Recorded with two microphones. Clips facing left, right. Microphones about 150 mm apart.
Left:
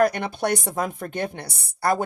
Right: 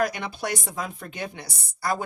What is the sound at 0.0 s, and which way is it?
A woman's voice, 55° left (ahead or behind).